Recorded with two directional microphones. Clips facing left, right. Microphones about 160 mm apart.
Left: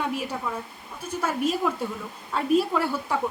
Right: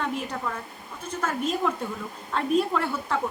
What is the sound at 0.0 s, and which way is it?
A woman's voice, 10° left (ahead or behind).